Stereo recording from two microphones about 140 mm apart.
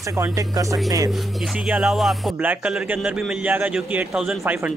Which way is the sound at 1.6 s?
5° right (ahead or behind).